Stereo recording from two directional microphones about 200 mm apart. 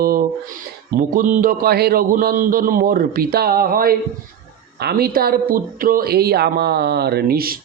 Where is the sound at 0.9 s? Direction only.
45° right (ahead or behind).